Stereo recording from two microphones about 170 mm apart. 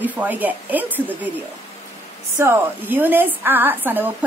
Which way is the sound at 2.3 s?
15° right (ahead or behind).